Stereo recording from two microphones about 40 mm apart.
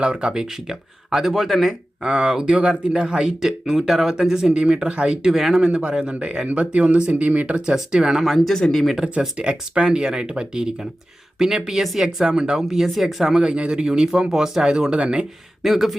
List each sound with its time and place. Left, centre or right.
0.0 s speech: right
0.3 s speech: centre
2.0 s speech: centre
4.5 s speech: right
5.3 s speech: centre
5.5 s speech: right
7.9 s speech: centre
8.2 s speech: centre
9.4 s speech: right
11.3 s speech: centre
12.0 s speech: right
12.5 s speech: centre
13.4 s speech: right
15.6 s speech: centre